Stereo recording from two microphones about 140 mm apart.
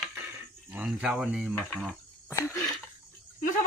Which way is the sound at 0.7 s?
5° right (ahead or behind).